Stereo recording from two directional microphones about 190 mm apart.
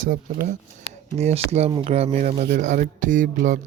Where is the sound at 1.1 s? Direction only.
35° right (ahead or behind).